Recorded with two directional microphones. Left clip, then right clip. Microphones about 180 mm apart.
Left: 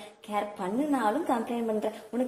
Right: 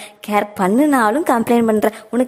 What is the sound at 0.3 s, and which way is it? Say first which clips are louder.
A woman's voice: right 15 dB; 45° right (ahead or behind).